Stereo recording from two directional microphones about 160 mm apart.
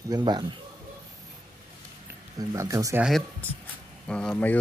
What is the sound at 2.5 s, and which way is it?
Speech, 20° right (ahead or behind).